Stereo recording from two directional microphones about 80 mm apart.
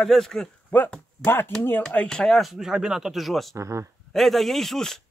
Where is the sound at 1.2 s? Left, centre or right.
Left.